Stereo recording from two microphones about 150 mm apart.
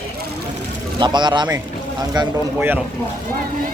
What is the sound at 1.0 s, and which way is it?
A man's voice, 30° right (ahead or behind).